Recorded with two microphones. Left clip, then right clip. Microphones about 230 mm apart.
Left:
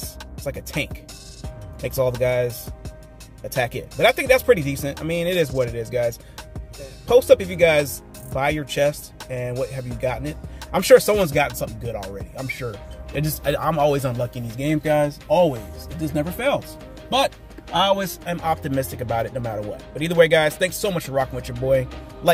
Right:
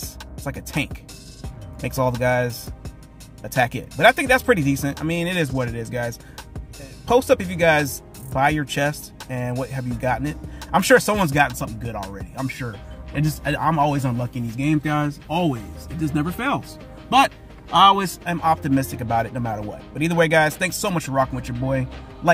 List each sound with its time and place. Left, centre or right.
0.0 s music: centre
1.8 s speech: centre
3.5 s speech: centre
17.7 s speech: centre
18.3 s speech: centre